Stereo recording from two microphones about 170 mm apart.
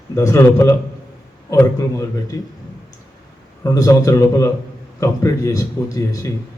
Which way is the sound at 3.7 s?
20° left (ahead or behind).